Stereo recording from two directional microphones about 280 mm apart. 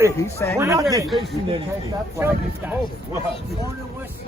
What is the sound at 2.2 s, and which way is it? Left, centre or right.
Speech, centre.